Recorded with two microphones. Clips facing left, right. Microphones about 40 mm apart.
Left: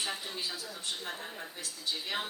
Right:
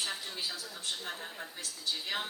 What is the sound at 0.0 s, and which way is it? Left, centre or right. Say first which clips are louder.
A woman's voice: left 1 dB; centre.